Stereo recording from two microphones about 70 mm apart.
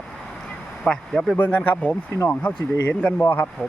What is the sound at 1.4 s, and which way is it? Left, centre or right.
Speech, left.